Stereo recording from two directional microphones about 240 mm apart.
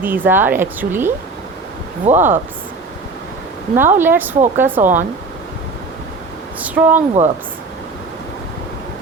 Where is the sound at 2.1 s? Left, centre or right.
Right.